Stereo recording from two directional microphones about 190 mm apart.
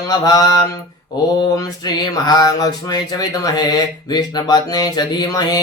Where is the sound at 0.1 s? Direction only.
20° left (ahead or behind).